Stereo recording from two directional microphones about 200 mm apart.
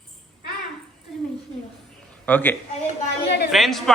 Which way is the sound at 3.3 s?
55° left (ahead or behind).